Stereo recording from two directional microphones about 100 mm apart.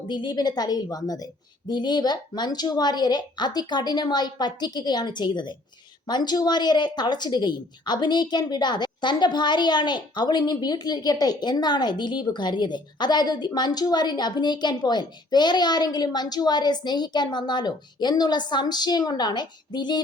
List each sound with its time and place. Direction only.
0.1 s speech: 50° left (ahead or behind)